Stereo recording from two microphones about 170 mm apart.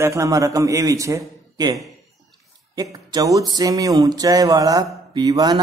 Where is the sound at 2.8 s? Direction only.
20° right (ahead or behind).